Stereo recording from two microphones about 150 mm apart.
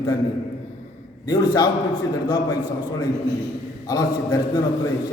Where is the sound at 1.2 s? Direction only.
30° left (ahead or behind).